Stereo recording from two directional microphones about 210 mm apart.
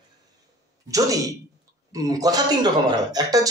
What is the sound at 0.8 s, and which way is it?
Speech, 15° right (ahead or behind).